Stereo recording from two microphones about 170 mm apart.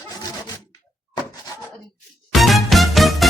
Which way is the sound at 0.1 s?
20° left (ahead or behind).